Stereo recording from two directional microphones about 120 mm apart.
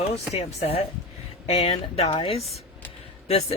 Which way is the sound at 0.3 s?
55° left (ahead or behind).